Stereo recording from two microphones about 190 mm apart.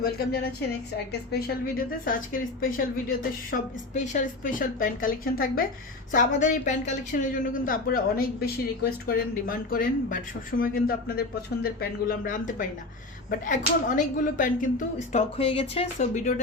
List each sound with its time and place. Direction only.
0.0 s a woman's voice: 55° left (ahead or behind); by 16.3 s 40° left (ahead or behind)